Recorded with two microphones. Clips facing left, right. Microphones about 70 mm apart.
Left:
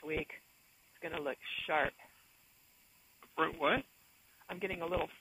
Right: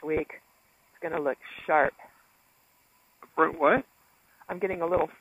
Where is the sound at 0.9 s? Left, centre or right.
Right.